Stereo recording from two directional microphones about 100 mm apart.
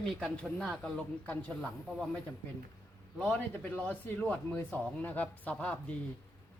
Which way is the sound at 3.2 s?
10° left (ahead or behind).